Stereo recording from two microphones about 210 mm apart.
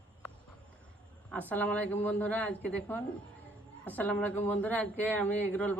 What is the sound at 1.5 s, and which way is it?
Speech, 5° left (ahead or behind).